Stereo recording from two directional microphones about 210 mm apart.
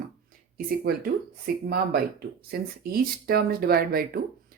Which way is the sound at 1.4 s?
50° right (ahead or behind).